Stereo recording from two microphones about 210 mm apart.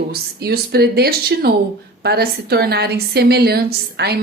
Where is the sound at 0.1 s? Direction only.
50° right (ahead or behind).